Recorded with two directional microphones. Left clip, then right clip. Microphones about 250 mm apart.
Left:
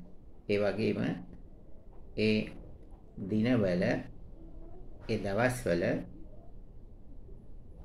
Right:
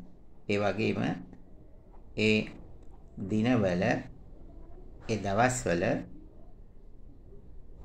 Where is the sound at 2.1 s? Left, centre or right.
Centre.